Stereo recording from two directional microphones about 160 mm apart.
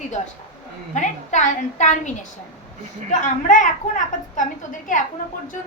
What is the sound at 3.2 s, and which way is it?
A woman's voice, 55° left (ahead or behind).